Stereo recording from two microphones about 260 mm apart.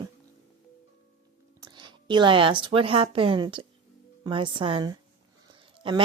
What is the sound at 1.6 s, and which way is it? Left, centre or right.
A woman's voice, centre.